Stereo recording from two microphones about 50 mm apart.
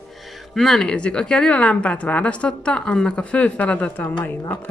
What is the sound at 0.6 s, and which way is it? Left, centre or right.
Speech, centre.